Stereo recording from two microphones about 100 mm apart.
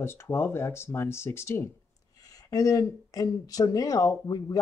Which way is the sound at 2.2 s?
35° left (ahead or behind).